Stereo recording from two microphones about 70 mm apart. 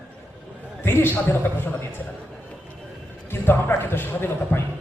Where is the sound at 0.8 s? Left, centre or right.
Left.